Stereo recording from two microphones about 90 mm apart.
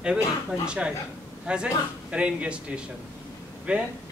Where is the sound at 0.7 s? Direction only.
10° right (ahead or behind).